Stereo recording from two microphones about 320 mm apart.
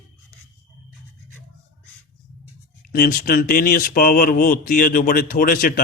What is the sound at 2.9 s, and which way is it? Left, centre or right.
Speech, left.